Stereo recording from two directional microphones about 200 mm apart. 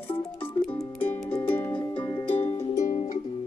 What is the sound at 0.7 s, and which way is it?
Music, 10° left (ahead or behind).